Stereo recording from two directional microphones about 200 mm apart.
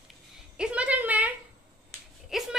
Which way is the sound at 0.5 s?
5° right (ahead or behind).